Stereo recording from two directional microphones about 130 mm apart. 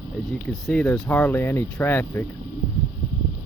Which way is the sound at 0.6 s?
10° left (ahead or behind).